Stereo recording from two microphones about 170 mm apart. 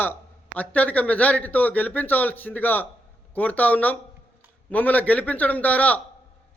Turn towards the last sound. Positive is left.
turn(degrees=10)  # may be behind; listen again after turning